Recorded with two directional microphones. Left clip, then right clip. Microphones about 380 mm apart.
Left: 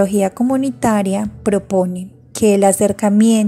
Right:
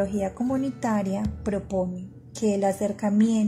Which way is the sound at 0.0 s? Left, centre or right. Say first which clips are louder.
Left 11 dB; centre.